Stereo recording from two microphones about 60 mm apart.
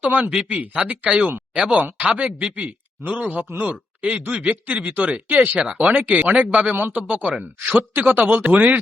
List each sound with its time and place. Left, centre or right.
0.0 s speech: right
7.7 s speech: right